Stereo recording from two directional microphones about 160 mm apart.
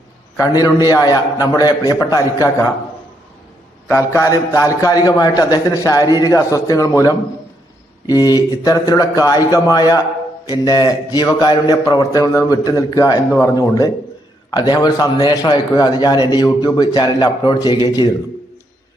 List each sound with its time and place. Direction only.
0.3 s a man's voice: 20° left (ahead or behind)
3.8 s a man's voice: 15° left (ahead or behind)